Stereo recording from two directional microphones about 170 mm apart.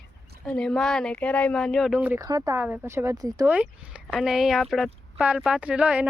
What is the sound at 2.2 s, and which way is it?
Speech, 20° right (ahead or behind).